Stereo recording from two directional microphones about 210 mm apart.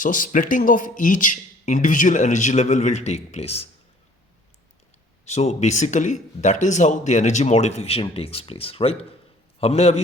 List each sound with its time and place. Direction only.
0.0 s speech: 40° left (ahead or behind)
5.2 s a man's voice: 30° left (ahead or behind)